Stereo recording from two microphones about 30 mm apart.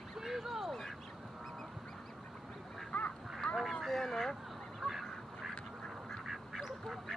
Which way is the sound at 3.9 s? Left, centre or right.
Centre.